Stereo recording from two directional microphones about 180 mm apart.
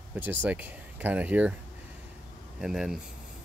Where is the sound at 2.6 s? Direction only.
5° right (ahead or behind).